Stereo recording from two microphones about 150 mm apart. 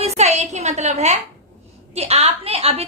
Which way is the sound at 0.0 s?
45° right (ahead or behind).